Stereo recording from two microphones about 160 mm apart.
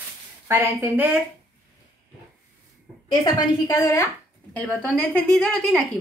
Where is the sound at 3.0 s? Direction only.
25° left (ahead or behind).